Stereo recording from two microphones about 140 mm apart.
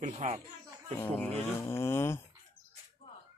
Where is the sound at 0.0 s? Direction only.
55° right (ahead or behind).